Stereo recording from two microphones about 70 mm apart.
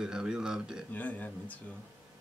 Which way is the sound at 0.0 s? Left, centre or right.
Centre.